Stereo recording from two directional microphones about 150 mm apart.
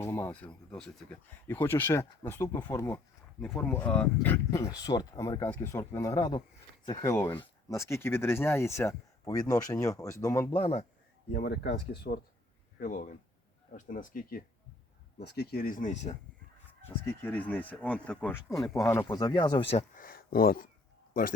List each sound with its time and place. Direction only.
0.0 s speech: 15° left (ahead or behind)
4.8 s speech: 25° left (ahead or behind)
5.5 s speech: 15° left (ahead or behind)
10.5 s speech: 40° left (ahead or behind)
11.3 s speech: 90° left
12.8 s speech: 65° left (ahead or behind)
15.2 s speech: 90° left; by 16.1 s 50° left (ahead or behind)
17.1 s speech: 10° left (ahead or behind); by 19.8 s 30° left (ahead or behind)
20.0 s speech: 75° left (ahead or behind)